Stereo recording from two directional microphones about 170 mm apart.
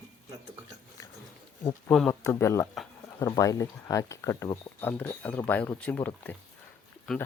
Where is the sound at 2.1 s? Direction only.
15° left (ahead or behind).